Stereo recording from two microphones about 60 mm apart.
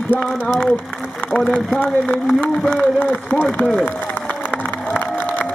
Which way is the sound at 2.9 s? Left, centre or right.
Left.